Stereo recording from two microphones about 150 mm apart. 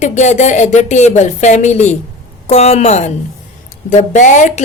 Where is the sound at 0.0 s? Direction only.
50° left (ahead or behind).